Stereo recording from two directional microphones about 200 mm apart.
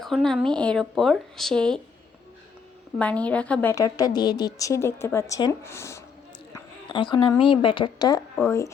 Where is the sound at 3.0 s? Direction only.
5° left (ahead or behind).